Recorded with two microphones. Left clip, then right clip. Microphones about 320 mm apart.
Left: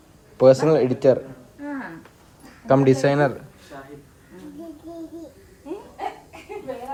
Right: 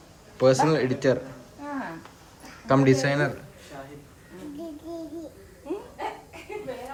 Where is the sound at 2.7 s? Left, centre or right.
Centre.